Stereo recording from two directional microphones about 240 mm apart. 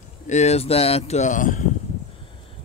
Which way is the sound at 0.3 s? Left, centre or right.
Left.